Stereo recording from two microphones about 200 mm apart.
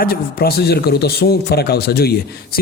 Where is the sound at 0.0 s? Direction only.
50° left (ahead or behind).